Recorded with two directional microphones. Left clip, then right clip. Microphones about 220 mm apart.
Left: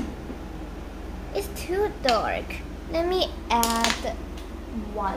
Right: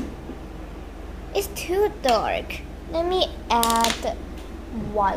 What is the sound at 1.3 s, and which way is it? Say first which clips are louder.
A child's voice: right 4 dB; 15° right (ahead or behind).